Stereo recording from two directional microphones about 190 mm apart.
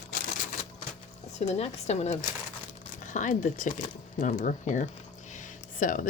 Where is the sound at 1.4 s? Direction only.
35° left (ahead or behind).